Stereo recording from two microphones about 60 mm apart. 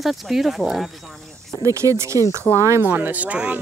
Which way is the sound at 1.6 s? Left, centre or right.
Right.